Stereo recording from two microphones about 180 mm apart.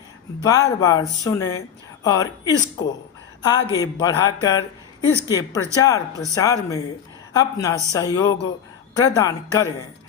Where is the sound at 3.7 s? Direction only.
20° left (ahead or behind).